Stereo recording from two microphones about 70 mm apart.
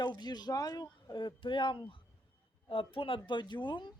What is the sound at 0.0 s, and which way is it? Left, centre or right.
Speech, left.